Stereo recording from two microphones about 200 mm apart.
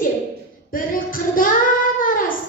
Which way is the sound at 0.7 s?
45° left (ahead or behind).